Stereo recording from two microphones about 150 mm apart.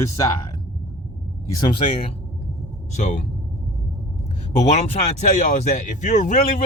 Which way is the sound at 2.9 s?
50° left (ahead or behind).